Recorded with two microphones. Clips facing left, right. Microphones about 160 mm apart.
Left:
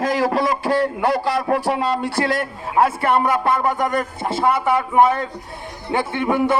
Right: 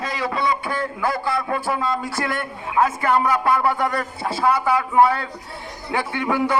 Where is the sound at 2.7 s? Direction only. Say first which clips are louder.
Left 2 dB; 30° left (ahead or behind).